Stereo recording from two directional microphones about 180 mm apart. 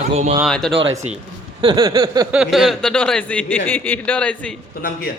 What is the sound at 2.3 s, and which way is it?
A man's voice, 5° right (ahead or behind).